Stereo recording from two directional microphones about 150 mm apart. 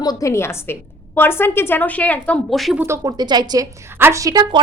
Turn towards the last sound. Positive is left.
turn(degrees=-25)  # may be behind; listen again after turning